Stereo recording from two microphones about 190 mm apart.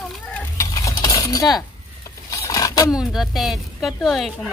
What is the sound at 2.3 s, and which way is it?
Vehicle, 20° left (ahead or behind).